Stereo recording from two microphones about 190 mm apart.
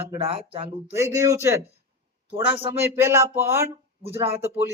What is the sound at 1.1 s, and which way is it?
Speech, 15° right (ahead or behind).